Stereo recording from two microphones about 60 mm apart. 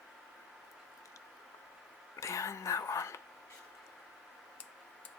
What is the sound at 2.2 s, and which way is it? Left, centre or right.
Whispering, left.